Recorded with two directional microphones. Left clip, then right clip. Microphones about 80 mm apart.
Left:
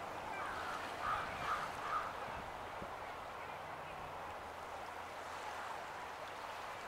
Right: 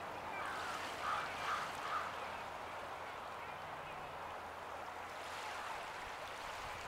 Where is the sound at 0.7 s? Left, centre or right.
Right.